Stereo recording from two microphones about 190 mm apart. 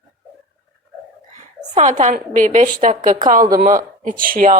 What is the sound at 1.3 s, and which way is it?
A woman's voice, 40° right (ahead or behind).